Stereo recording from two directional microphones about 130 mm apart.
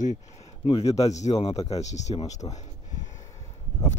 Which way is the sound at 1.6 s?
60° left (ahead or behind).